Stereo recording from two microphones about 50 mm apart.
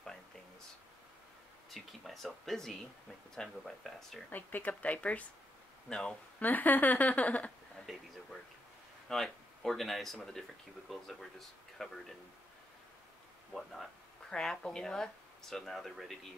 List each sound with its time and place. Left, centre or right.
1.7 s speech: centre
4.3 s speech: left
5.9 s speech: centre
6.4 s speech: left
7.8 s speech: centre
13.5 s speech: centre
14.3 s speech: centre